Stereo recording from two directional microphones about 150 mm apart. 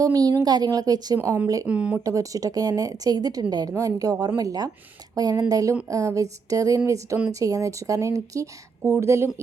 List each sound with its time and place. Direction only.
0.0 s speech: 25° right (ahead or behind)
1.6 s speech: 10° right (ahead or behind)
2.0 s speech: 20° right (ahead or behind)